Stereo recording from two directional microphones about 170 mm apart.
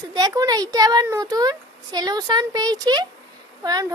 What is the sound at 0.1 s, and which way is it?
Speech, 25° right (ahead or behind).